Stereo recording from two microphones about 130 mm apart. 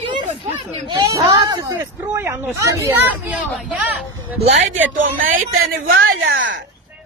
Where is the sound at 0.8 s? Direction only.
35° right (ahead or behind).